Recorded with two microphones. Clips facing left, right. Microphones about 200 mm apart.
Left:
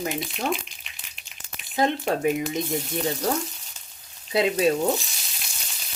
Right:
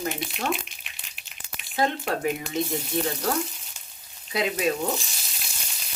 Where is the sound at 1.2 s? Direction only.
5° right (ahead or behind).